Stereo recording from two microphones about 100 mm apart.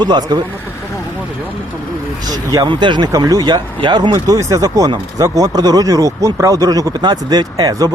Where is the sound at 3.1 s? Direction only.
40° right (ahead or behind).